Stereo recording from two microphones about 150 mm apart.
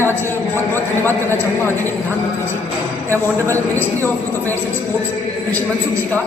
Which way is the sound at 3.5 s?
15° left (ahead or behind).